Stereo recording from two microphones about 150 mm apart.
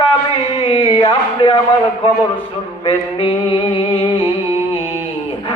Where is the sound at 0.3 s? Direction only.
35° left (ahead or behind).